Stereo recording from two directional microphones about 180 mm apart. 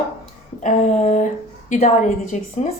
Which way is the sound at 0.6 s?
40° left (ahead or behind).